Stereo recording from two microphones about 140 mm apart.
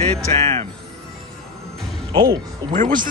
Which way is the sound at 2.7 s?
65° right (ahead or behind).